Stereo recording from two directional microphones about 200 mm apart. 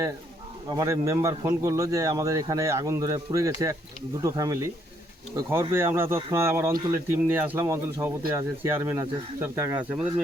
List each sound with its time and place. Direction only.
0.7 s a man's voice: 15° right (ahead or behind)